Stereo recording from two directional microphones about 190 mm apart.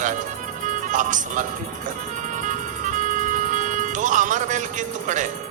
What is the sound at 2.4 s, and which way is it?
Music, 40° right (ahead or behind).